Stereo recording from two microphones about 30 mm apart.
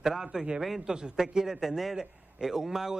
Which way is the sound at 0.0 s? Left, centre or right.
Centre.